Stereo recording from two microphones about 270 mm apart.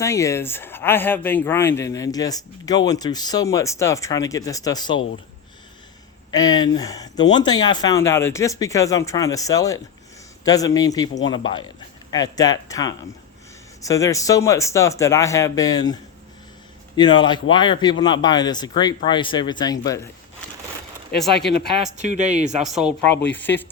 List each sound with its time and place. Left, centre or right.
0.0 s speech: centre
6.3 s speech: centre
21.5 s speech: left
22.0 s speech: right
22.6 s speech: centre
23.0 s speech: left